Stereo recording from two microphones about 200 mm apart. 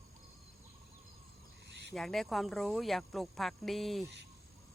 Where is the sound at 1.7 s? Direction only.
60° right (ahead or behind).